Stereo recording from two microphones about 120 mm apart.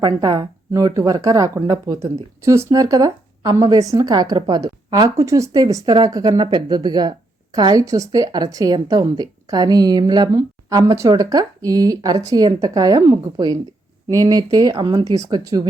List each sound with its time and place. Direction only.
0.0 s a woman's voice: 30° right (ahead or behind)